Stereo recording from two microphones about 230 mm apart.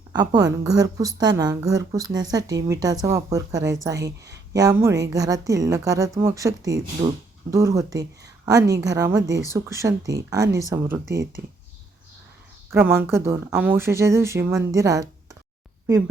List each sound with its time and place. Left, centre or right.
0.1 s a woman's voice: centre
13.0 s a woman's voice: centre